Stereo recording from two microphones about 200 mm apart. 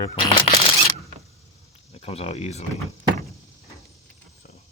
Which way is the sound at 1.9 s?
30° left (ahead or behind).